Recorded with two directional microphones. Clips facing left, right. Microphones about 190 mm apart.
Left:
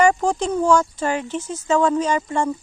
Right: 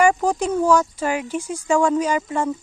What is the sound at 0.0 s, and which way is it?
Speech, 5° right (ahead or behind).